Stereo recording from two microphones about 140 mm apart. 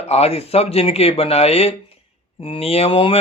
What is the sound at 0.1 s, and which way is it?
Speech, 45° left (ahead or behind).